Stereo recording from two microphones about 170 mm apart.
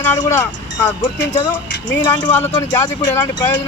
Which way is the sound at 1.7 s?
90° left.